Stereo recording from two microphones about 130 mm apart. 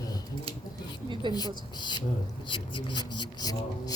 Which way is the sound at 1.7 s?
35° left (ahead or behind).